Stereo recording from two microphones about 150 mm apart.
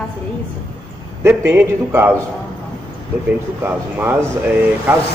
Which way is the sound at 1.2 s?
15° right (ahead or behind).